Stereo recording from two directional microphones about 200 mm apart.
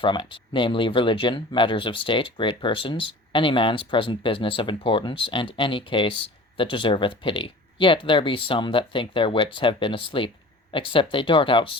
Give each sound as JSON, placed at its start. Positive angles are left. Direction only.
{"t": 0.0, "sound": "speech", "side_deg": 25}